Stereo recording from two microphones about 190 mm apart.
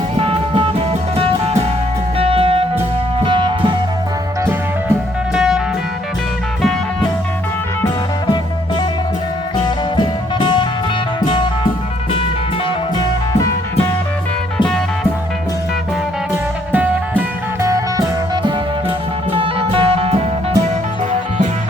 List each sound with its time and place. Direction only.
0.2 s music: 30° right (ahead or behind)
2.1 s music: 30° right (ahead or behind)
5.3 s music: 5° right (ahead or behind)
16.7 s music: 10° right (ahead or behind)
19.3 s music: 30° right (ahead or behind)